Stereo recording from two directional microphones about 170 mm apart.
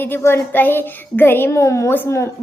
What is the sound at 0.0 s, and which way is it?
A woman's voice, 15° left (ahead or behind).